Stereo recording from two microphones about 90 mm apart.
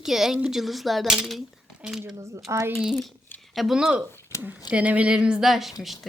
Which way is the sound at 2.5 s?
35° right (ahead or behind).